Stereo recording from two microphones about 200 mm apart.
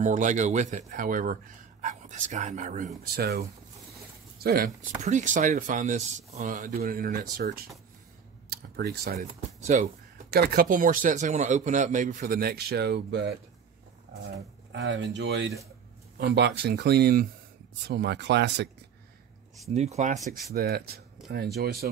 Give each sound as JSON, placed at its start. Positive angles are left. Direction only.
{"t": 0.0, "sound": "a man's voice", "side_deg": -40}
{"t": 3.0, "sound": "a man's voice", "side_deg": -50}
{"t": 5.0, "sound": "a man's voice", "side_deg": -40}
{"t": 9.7, "sound": "a man's voice", "side_deg": -40}
{"t": 10.3, "sound": "a man's voice", "side_deg": -50}
{"t": 14.7, "sound": "speech", "side_deg": -65}
{"t": 19.7, "sound": "a man's voice", "side_deg": -35}
{"t": 20.5, "sound": "a man's voice", "side_deg": -50}